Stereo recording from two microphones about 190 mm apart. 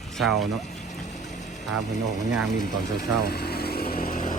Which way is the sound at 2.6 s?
45° left (ahead or behind).